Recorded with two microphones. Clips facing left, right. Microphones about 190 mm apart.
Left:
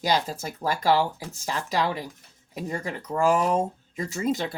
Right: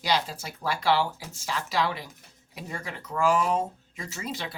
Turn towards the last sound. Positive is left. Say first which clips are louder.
# left 9 dB
turn(degrees=45)  # may be behind; listen again after turning